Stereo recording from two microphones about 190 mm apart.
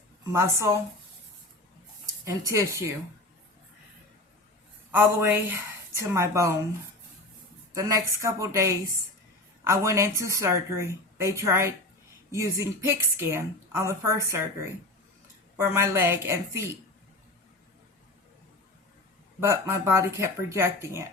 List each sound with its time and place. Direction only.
0.3 s a woman's voice: 15° right (ahead or behind)
2.0 s speech: 15° right (ahead or behind)
4.9 s a woman's voice: 10° right (ahead or behind)
7.7 s a woman's voice: 15° right (ahead or behind)
19.4 s a woman's voice: 15° right (ahead or behind)